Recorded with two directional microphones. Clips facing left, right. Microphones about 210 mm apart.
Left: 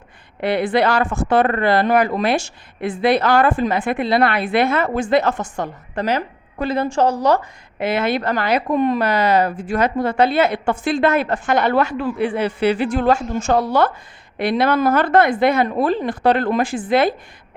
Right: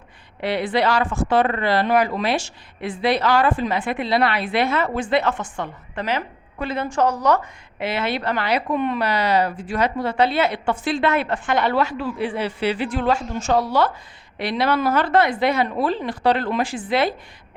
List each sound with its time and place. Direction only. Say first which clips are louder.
0.4 s speech: left 3 dB; 50° left (ahead or behind); by 7.4 s 30° left (ahead or behind)
7.8 s speech: left 5 dB; 50° left (ahead or behind)